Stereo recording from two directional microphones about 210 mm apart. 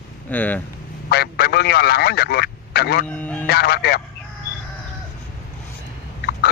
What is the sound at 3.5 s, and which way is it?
Speech, 50° left (ahead or behind).